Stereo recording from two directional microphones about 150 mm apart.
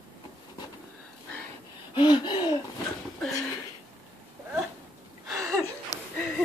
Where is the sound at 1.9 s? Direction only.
35° left (ahead or behind).